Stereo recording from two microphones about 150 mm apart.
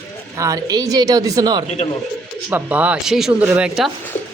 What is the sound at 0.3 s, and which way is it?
Speech, 20° right (ahead or behind).